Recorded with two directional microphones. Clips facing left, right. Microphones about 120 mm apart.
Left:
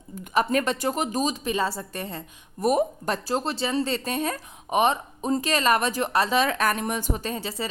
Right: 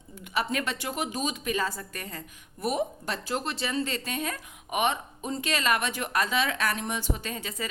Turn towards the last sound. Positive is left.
turn(degrees=35)  # may be behind; listen again after turning